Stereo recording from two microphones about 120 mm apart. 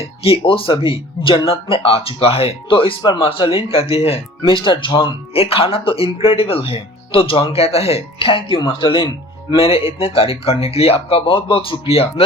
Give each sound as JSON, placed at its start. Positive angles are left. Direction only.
{"t": 0.0, "sound": "speech", "side_deg": 55}